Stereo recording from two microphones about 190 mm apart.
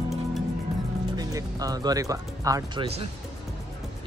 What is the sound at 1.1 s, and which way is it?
Speech, 20° right (ahead or behind).